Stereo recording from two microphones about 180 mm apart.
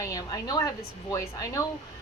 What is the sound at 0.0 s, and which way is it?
Speech, 20° left (ahead or behind).